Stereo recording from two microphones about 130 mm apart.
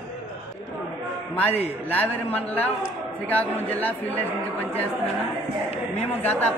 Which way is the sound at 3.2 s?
15° left (ahead or behind).